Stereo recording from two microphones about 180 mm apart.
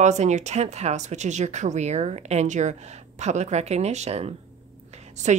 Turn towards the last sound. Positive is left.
turn(degrees=-40)  # may be behind; listen again after turning